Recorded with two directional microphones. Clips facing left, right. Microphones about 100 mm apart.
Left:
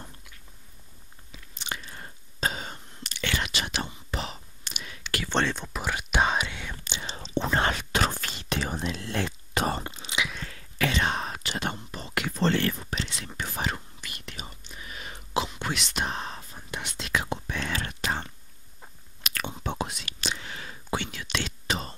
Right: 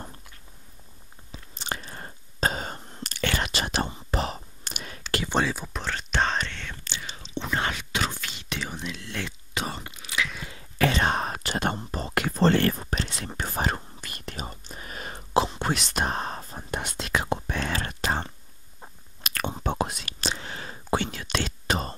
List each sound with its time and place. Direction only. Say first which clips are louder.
1.3 s chewing: right 3 dB; 35° right (ahead or behind)
5.3 s speech: even; 5° right (ahead or behind)
5.8 s whispering: left 1 dB; 10° left (ahead or behind)
7.1 s whispering: left 4 dB; 40° left (ahead or behind)
9.8 s whispering: left 4 dB; 30° left (ahead or behind)
10.8 s whispering: right 3 dB; 40° right (ahead or behind)